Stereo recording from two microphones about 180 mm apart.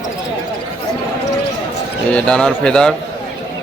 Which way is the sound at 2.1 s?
5° left (ahead or behind).